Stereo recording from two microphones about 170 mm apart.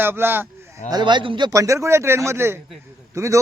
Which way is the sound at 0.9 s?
25° right (ahead or behind).